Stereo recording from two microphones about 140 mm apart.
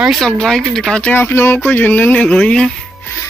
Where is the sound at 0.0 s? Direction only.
Centre (ahead or behind).